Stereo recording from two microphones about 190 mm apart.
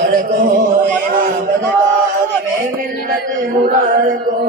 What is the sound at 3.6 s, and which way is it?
Mantra, 45° right (ahead or behind).